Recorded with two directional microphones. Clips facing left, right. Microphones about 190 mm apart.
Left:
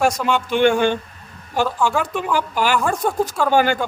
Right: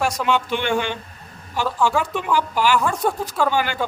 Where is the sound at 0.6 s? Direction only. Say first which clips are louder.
Left 7 dB; 50° left (ahead or behind).